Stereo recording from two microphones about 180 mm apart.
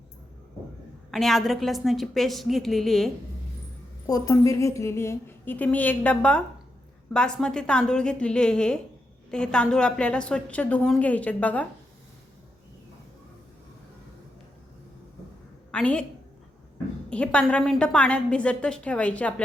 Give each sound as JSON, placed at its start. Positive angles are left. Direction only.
{"t": 1.1, "sound": "a woman's voice", "side_deg": 0}
{"t": 4.0, "sound": "a woman's voice", "side_deg": 20}
{"t": 15.7, "sound": "a woman's voice", "side_deg": 5}
{"t": 17.1, "sound": "a woman's voice", "side_deg": 5}